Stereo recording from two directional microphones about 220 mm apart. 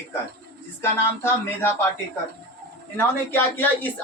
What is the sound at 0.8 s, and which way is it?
Speech, 10° left (ahead or behind).